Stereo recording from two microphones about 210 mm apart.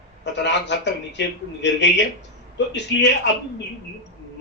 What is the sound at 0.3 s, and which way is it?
A man's voice, 55° left (ahead or behind).